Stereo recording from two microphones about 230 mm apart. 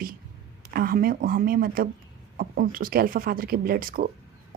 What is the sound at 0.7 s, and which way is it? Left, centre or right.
Speech, right.